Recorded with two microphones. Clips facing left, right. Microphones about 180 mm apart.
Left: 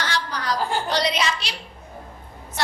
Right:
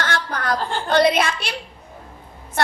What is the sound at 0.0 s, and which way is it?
Chuckle, 50° right (ahead or behind).